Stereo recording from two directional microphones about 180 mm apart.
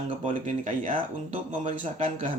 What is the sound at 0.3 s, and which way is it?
A man's voice, 45° right (ahead or behind).